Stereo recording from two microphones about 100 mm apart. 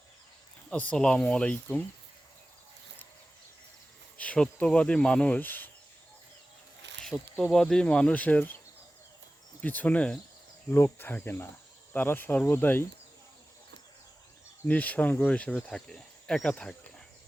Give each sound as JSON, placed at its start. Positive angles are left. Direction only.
{"t": 0.7, "sound": "speech", "side_deg": 15}
{"t": 4.2, "sound": "speech", "side_deg": 10}
{"t": 7.0, "sound": "speech", "side_deg": 5}
{"t": 9.6, "sound": "speech", "side_deg": 15}
{"t": 10.7, "sound": "speech", "side_deg": 25}
{"t": 14.7, "sound": "speech", "side_deg": 15}